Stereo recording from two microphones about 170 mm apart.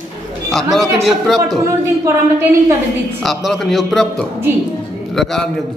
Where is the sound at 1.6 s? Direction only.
15° right (ahead or behind).